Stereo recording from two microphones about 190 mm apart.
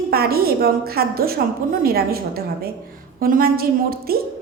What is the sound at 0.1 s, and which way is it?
A woman's voice, 55° right (ahead or behind).